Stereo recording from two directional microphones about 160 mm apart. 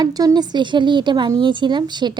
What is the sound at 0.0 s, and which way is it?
Speech, 25° right (ahead or behind).